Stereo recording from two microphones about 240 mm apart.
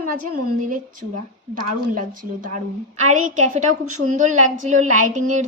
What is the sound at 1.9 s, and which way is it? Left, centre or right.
A woman's voice, right.